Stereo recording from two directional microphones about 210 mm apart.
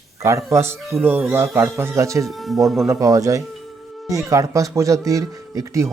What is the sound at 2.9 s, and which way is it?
Speech, 15° right (ahead or behind).